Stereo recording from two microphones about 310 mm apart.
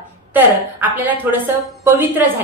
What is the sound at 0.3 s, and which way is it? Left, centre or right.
A woman's voice, centre.